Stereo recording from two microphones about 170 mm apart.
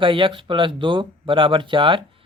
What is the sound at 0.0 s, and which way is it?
Speech, 30° right (ahead or behind).